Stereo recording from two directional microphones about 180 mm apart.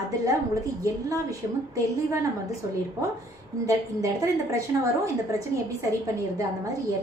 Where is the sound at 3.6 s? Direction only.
15° right (ahead or behind).